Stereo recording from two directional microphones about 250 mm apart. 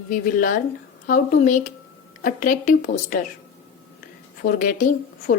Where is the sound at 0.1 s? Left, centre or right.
Left.